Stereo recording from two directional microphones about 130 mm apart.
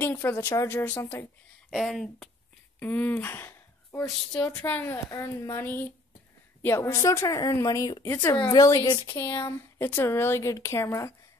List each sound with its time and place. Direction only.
0.0 s a woman's voice: 15° left (ahead or behind)
1.7 s speech: centre (ahead or behind)
2.8 s a woman's voice: 15° left (ahead or behind)